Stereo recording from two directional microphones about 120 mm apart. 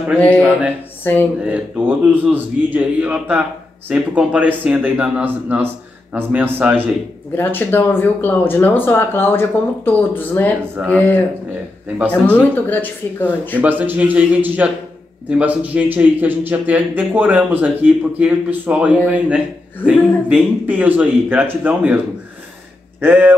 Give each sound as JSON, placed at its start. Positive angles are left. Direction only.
{"t": 1.1, "sound": "speech", "side_deg": 20}
{"t": 1.4, "sound": "a man's voice", "side_deg": -15}
{"t": 7.3, "sound": "speech", "side_deg": 15}
{"t": 13.6, "sound": "a man's voice", "side_deg": -15}